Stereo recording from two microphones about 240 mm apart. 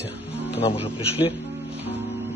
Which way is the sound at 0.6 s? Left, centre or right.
Left.